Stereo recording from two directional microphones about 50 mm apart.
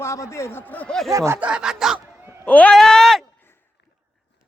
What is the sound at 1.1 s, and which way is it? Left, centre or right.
Speech, right.